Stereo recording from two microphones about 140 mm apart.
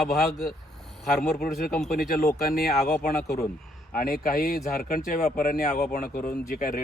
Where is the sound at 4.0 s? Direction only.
90° left.